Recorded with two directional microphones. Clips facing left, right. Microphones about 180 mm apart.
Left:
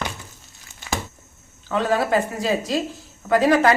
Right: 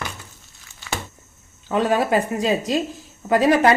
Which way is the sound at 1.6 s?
15° right (ahead or behind).